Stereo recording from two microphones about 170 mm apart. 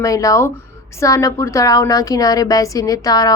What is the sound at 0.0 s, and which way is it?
A woman's voice, 20° left (ahead or behind).